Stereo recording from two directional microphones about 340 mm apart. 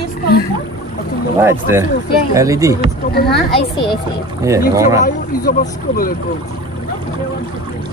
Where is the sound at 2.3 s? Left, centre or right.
Centre.